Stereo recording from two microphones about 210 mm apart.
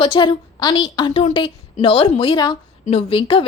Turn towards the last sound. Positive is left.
turn(degrees=25)  # may be behind; listen again after turning